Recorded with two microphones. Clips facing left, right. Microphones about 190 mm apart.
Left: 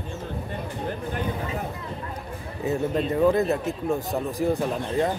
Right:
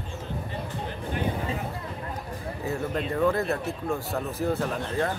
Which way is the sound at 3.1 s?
20° left (ahead or behind).